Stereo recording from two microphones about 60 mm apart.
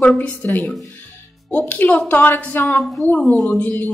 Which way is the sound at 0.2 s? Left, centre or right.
Left.